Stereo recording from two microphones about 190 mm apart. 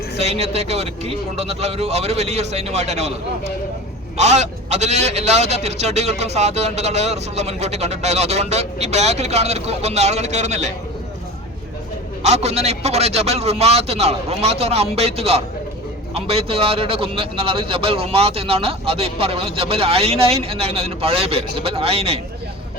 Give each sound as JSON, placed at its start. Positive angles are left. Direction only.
{"t": 0.2, "sound": "a man's voice", "side_deg": -35}
{"t": 4.2, "sound": "a man's voice", "side_deg": -35}
{"t": 12.2, "sound": "a man's voice", "side_deg": -35}